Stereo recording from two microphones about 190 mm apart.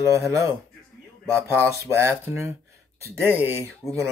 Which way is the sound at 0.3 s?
15° right (ahead or behind).